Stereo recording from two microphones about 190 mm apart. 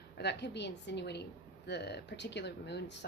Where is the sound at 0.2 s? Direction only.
65° left (ahead or behind).